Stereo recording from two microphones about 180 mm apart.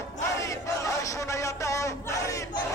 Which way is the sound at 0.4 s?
15° left (ahead or behind).